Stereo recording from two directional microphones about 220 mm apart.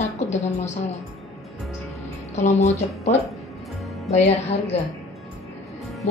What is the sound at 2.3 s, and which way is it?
A woman's voice, 30° left (ahead or behind).